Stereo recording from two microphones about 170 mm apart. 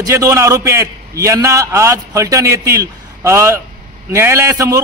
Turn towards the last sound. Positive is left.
turn(degrees=-20)  # may be behind; listen again after turning